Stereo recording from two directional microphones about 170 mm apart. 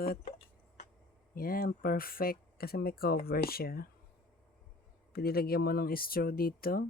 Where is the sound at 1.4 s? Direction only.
60° left (ahead or behind).